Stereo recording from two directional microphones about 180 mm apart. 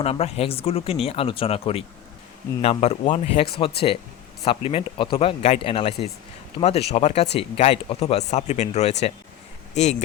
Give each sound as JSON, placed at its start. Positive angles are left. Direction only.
{"t": 0.0, "sound": "speech", "side_deg": 35}
{"t": 3.6, "sound": "speech", "side_deg": 30}